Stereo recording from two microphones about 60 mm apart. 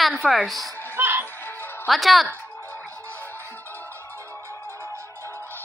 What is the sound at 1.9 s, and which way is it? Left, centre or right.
Speech, centre.